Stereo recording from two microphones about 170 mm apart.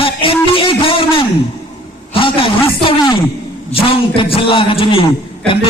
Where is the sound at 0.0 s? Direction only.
30° left (ahead or behind).